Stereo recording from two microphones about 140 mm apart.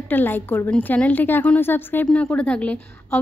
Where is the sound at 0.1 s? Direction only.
15° left (ahead or behind).